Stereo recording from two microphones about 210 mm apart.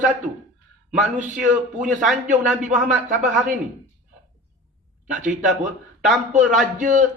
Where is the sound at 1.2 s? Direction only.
5° right (ahead or behind).